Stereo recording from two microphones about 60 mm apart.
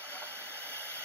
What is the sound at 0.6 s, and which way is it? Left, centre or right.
Hair dryer, left.